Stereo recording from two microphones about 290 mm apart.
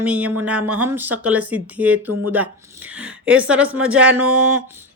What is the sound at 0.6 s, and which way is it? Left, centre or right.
Speech, right.